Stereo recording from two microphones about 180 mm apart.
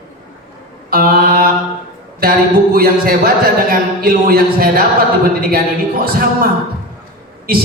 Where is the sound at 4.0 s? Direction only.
55° right (ahead or behind).